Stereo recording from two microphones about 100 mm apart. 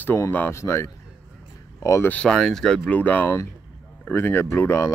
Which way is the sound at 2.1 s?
10° left (ahead or behind).